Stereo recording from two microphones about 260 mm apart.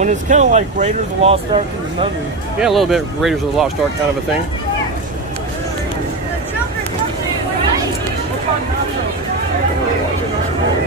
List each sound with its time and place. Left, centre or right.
0.0 s speech: right
2.6 s speech: centre